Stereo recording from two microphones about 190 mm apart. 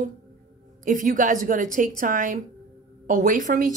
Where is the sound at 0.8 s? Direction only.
45° right (ahead or behind).